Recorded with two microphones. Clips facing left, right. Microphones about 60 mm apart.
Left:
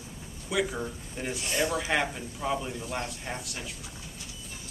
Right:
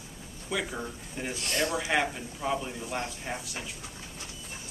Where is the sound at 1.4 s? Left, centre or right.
Centre.